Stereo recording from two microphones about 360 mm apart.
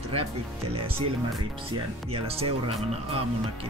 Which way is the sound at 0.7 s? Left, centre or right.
Centre.